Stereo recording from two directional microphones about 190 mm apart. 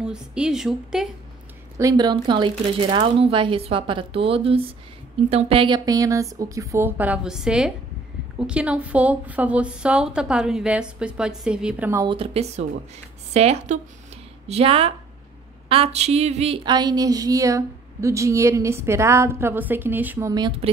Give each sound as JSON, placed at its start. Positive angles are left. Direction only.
{"t": 0.0, "sound": "a woman's voice", "side_deg": -5}
{"t": 1.8, "sound": "speech", "side_deg": -20}
{"t": 5.3, "sound": "a sound", "side_deg": -30}
{"t": 8.4, "sound": "a woman's voice", "side_deg": -5}
{"t": 12.1, "sound": "speech", "side_deg": -30}
{"t": 15.7, "sound": "a sound", "side_deg": -30}